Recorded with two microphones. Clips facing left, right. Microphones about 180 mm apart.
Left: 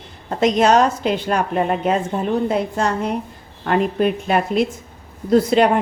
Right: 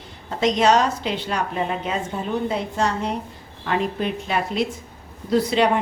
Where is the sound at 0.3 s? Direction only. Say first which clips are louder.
Left 3 dB; 50° left (ahead or behind).